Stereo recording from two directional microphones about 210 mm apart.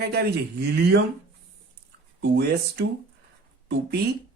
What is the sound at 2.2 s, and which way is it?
Speech, 50° right (ahead or behind).